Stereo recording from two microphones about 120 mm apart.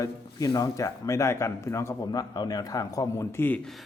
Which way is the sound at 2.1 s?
30° left (ahead or behind).